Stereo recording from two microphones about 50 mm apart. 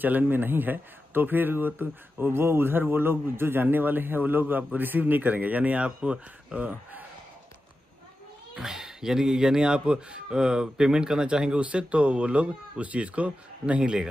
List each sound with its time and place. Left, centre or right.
0.0 s speech: right
8.5 s speech: centre